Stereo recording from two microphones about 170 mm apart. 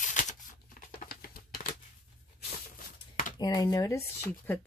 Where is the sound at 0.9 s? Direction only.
60° left (ahead or behind).